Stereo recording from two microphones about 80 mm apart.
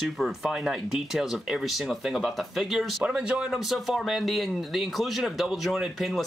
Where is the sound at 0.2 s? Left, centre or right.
Centre.